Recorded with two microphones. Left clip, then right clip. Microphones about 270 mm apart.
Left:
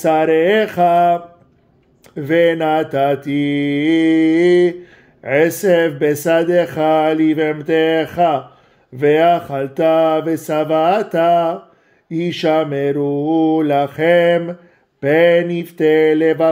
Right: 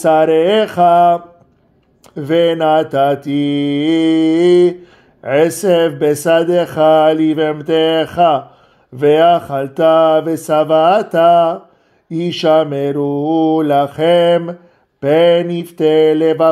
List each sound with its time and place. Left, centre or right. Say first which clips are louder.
0.0 s mantra: right 3 dB; centre
5.2 s speech: right 2 dB; right
5.6 s mantra: right 1 dB; centre